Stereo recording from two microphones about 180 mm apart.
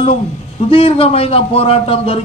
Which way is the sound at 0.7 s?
30° left (ahead or behind).